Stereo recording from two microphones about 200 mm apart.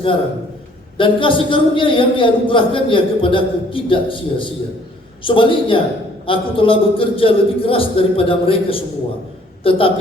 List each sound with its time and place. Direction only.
0.9 s a man's voice: 25° left (ahead or behind)